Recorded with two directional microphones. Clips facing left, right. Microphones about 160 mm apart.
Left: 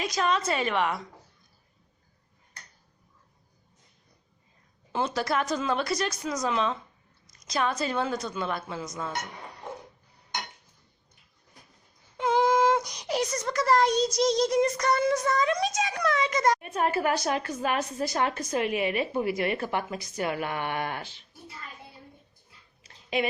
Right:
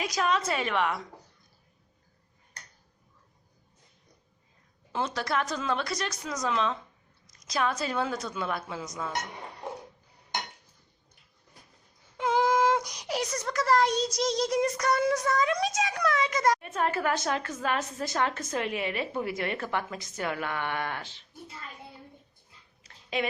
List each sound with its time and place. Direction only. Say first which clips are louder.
0.0 s a woman's voice: left 1 dB; 5° right (ahead or behind)
4.9 s a woman's voice: left 3 dB; 5° left (ahead or behind)
12.1 s a sound: left 2 dB; centre (ahead or behind)
13.5 s a woman's voice: left 1 dB; centre (ahead or behind)
16.6 s a woman's voice: left 2 dB; 15° left (ahead or behind)
23.0 s speech: left 3 dB; 15° left (ahead or behind)